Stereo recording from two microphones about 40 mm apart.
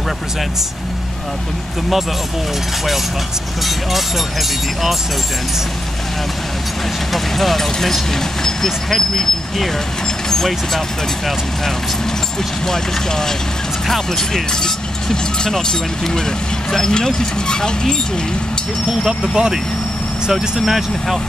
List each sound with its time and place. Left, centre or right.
3.6 s speech: centre
7.1 s speech: centre
12.6 s speech: centre
19.3 s speech: centre